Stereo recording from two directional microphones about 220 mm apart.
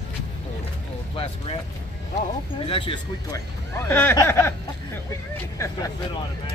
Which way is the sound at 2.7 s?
25° left (ahead or behind).